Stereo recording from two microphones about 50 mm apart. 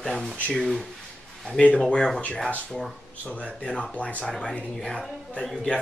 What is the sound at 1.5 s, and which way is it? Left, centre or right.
Speech, left.